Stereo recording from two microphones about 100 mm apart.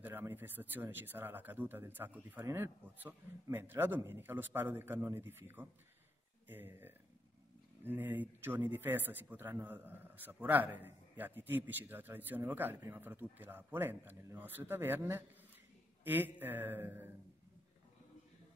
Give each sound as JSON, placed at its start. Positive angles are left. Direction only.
{"t": 0.0, "sound": "a man's voice", "side_deg": -20}